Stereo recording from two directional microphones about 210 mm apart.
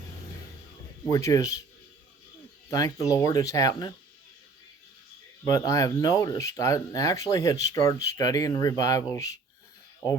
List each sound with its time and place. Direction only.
1.0 s speech: 15° left (ahead or behind)
2.6 s speech: 15° left (ahead or behind)
5.5 s speech: 15° left (ahead or behind)